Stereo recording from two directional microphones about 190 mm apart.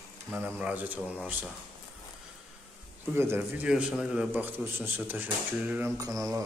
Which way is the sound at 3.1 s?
10° right (ahead or behind).